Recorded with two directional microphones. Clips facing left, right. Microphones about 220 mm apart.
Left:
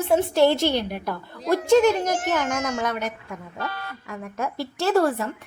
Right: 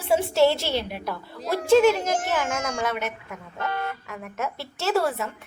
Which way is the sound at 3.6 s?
25° right (ahead or behind).